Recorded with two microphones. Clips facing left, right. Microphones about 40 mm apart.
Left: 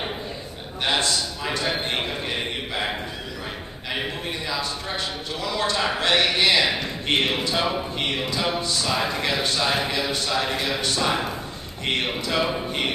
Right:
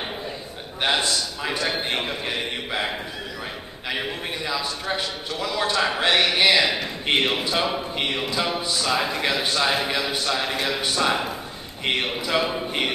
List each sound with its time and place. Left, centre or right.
0.8 s a man's voice: centre
4.5 s a man's voice: centre